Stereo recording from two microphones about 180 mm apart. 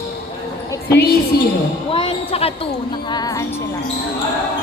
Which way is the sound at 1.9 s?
30° left (ahead or behind).